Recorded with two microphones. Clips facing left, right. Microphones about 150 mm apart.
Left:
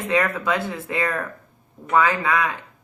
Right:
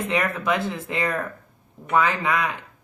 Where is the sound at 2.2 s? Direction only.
20° right (ahead or behind).